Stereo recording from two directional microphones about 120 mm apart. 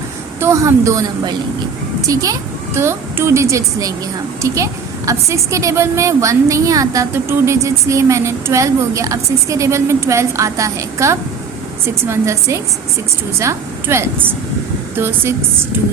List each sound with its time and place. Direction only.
0.3 s a woman's voice: 25° right (ahead or behind)